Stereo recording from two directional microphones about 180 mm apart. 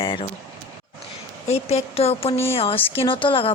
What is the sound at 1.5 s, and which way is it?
Speech, 35° left (ahead or behind).